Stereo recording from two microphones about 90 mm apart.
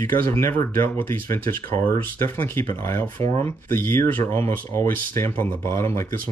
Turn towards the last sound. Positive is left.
turn(degrees=35)  # may be behind; listen again after turning